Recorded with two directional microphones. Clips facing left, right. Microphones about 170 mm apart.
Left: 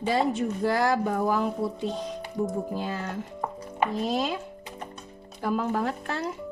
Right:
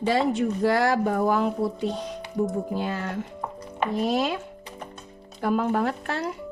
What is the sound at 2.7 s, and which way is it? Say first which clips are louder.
Speech: right 3 dB; 75° right (ahead or behind).